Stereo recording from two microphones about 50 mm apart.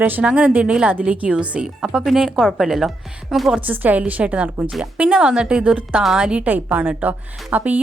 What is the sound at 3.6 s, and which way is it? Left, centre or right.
A woman's voice, right.